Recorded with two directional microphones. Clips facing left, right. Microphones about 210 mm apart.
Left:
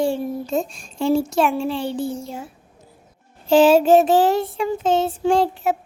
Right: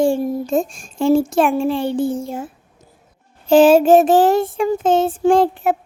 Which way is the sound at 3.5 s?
50° right (ahead or behind).